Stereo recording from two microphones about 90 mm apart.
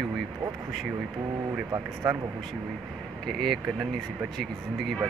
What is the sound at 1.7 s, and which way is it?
Speech, 35° right (ahead or behind).